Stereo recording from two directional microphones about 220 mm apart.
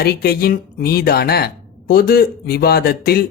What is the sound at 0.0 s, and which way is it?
Speech, 45° left (ahead or behind).